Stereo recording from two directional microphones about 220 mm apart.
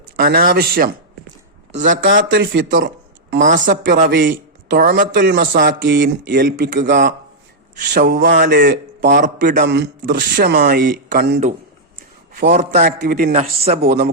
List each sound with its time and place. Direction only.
0.2 s a man's voice: 40° right (ahead or behind)
1.9 s a man's voice: 40° right (ahead or behind)
2.3 s speech: 55° right (ahead or behind)
2.8 s a sound: 55° right (ahead or behind)
3.4 s a man's voice: 35° right (ahead or behind)
13.8 s a man's voice: 45° right (ahead or behind)